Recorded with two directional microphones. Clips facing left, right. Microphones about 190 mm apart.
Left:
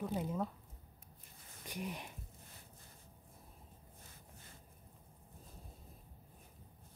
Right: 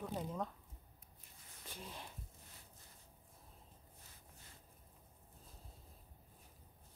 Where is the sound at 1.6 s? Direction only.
15° left (ahead or behind).